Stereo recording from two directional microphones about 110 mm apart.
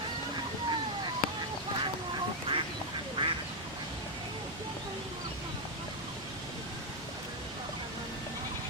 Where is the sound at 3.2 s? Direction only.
45° right (ahead or behind).